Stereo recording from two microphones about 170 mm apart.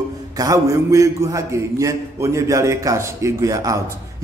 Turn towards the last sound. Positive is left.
turn(degrees=-20)  # may be behind; listen again after turning